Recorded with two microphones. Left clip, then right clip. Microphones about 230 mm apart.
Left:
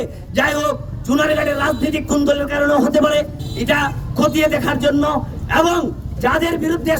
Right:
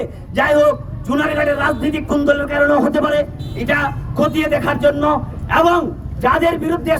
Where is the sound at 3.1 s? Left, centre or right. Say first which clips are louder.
Even; centre.